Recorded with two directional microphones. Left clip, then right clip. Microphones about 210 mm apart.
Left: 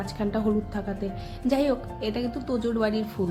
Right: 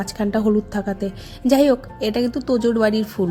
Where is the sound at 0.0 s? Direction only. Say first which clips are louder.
Right 7 dB; 30° right (ahead or behind).